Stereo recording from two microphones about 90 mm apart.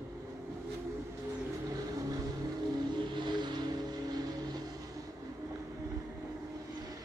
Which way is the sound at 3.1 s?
55° right (ahead or behind).